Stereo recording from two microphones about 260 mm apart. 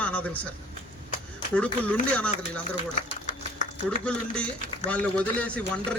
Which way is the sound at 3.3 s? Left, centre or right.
Left.